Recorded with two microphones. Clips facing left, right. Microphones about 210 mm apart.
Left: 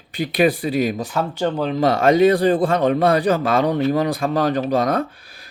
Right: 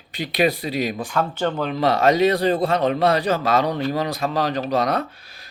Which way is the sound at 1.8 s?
50° left (ahead or behind).